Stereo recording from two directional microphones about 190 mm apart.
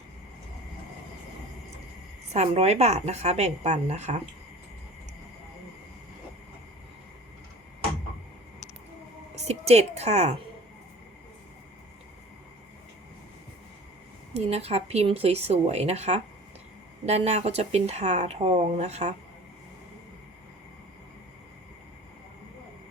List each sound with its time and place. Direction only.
2.3 s speech: 35° right (ahead or behind)
9.3 s a woman's voice: 35° right (ahead or behind)
14.3 s speech: 35° right (ahead or behind)